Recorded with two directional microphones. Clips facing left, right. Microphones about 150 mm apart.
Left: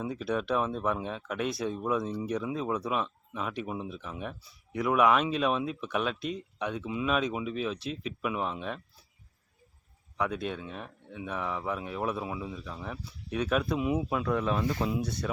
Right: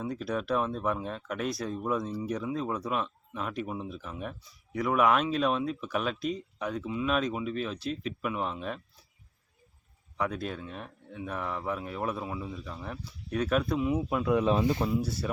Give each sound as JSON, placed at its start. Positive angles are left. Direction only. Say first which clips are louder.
{"t": 0.0, "sound": "speech", "louder": "left 1 dB", "side_deg": 0}
{"t": 10.2, "sound": "speech", "louder": "left 1 dB", "side_deg": 0}
{"t": 14.1, "sound": "speech", "louder": "right 2 dB", "side_deg": -5}
{"t": 14.3, "sound": "speech", "louder": "right 6 dB", "side_deg": -20}
{"t": 15.0, "sound": "speech", "louder": "even", "side_deg": -5}